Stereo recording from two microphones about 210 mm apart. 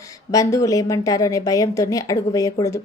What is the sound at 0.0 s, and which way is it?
A woman's voice, 15° left (ahead or behind).